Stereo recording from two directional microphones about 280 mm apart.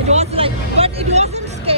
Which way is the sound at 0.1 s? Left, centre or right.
Right.